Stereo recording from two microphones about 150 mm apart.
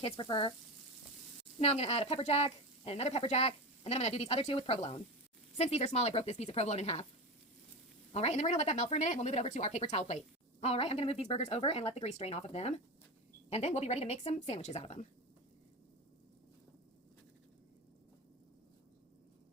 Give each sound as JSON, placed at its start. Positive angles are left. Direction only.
{"t": 0.0, "sound": "speech", "side_deg": 35}
{"t": 1.5, "sound": "speech", "side_deg": 45}
{"t": 8.1, "sound": "speech", "side_deg": 45}